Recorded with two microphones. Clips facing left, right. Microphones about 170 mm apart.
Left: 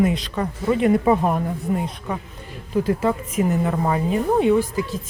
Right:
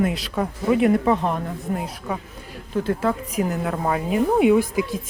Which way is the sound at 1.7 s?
Centre (ahead or behind).